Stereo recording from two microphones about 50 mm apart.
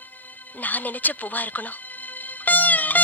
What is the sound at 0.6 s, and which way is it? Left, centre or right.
Speech, left.